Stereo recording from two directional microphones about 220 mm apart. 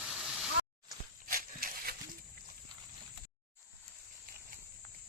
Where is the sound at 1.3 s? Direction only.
40° right (ahead or behind).